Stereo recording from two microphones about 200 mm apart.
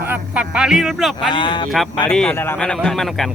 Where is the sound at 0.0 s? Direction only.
5° right (ahead or behind).